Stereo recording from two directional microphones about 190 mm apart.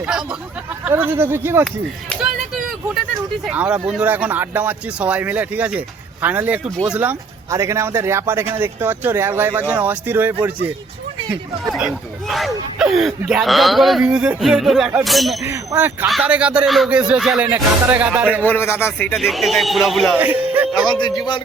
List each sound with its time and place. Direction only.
0.0 s speech: 5° right (ahead or behind)
1.6 s a sound: centre (ahead or behind)
3.4 s speech: 5° right (ahead or behind)
15.4 s speech: 10° right (ahead or behind)
18.4 s a man's voice: 10° left (ahead or behind)
20.1 s a sound: 10° right (ahead or behind)
20.8 s a man's voice: 25° left (ahead or behind)